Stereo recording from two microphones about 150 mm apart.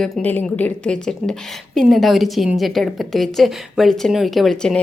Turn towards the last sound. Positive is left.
turn(degrees=0)  # may be behind; listen again after turning